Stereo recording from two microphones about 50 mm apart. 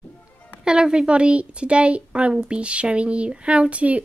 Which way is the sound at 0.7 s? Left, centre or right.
Centre.